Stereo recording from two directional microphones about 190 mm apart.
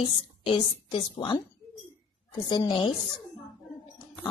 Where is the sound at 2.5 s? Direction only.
25° left (ahead or behind).